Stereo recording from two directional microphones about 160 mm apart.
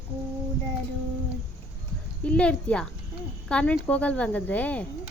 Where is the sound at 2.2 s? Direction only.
5° left (ahead or behind).